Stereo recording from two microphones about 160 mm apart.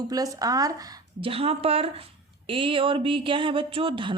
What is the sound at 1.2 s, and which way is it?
Speech, 35° right (ahead or behind).